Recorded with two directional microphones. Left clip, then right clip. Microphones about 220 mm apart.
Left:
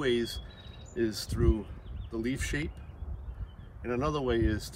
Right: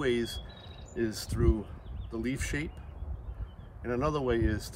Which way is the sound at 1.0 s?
15° right (ahead or behind).